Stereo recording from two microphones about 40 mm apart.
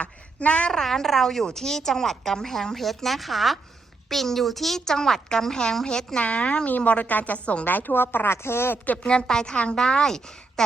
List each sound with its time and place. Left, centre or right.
0.0 s a sound: left
0.7 s a woman's voice: centre
6.1 s a woman's voice: left
6.7 s a woman's voice: left
7.6 s speech: left
9.2 s a woman's voice: centre